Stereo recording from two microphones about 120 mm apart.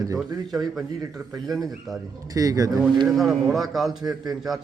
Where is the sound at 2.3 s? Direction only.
30° right (ahead or behind).